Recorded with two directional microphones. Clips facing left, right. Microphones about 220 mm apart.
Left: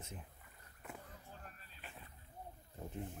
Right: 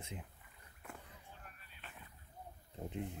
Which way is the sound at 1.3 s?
40° left (ahead or behind).